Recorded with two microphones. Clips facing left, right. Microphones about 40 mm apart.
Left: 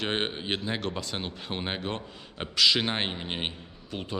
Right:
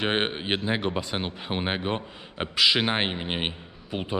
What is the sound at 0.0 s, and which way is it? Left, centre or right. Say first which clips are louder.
Speech: right 4 dB; right.